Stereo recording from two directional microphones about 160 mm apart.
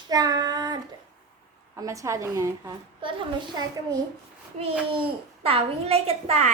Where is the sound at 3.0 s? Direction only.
30° right (ahead or behind).